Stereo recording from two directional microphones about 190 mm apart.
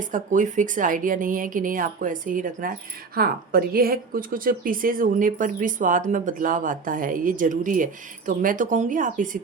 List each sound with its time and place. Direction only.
0.0 s a woman's voice: 45° right (ahead or behind)